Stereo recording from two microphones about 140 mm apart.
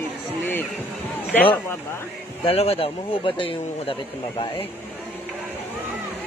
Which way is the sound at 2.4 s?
45° left (ahead or behind).